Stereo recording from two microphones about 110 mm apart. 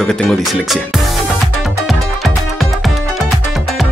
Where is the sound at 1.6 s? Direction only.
Centre (ahead or behind).